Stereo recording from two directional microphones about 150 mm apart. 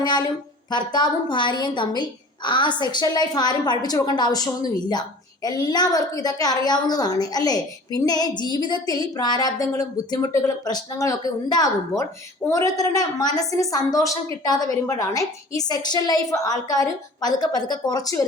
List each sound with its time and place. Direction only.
0.0 s a woman's voice: 30° left (ahead or behind)